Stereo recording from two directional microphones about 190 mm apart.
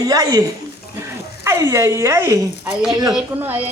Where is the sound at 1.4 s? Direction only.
15° right (ahead or behind).